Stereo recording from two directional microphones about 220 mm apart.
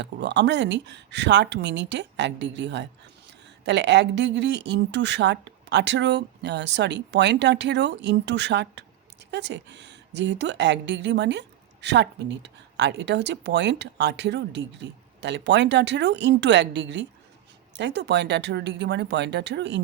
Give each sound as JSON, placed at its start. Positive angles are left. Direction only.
{"t": 0.0, "sound": "speech", "side_deg": -50}